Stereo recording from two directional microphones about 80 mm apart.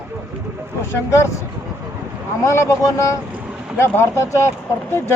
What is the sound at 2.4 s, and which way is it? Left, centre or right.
Speech, left.